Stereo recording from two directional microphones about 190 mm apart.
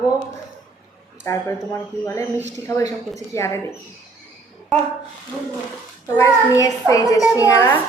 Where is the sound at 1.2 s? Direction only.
15° left (ahead or behind).